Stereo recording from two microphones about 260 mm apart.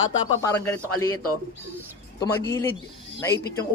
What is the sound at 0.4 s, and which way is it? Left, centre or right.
Speech, centre.